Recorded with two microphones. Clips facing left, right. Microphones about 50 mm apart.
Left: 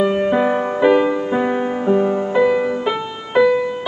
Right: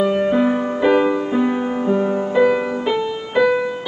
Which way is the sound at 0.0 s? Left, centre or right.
Left.